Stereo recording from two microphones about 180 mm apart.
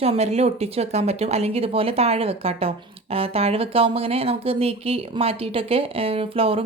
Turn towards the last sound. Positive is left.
turn(degrees=-30)  # may be behind; listen again after turning